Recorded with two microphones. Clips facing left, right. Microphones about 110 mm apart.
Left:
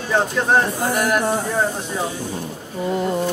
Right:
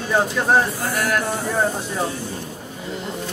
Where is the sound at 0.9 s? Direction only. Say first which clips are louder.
Left 3 dB; 25° left (ahead or behind).